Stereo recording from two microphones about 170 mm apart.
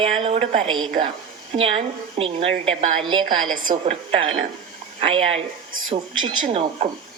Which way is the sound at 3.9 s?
35° right (ahead or behind).